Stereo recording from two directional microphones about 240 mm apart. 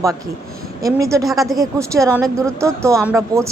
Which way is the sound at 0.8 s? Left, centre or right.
Centre.